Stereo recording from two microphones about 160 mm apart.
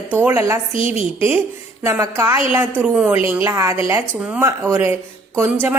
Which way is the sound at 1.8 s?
15° right (ahead or behind).